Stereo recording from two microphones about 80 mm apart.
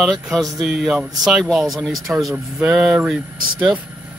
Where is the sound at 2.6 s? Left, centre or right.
Centre.